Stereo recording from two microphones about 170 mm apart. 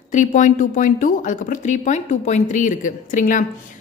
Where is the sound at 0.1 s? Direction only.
45° left (ahead or behind).